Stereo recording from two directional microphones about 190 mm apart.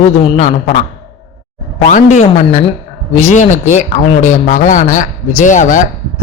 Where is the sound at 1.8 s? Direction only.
40° left (ahead or behind).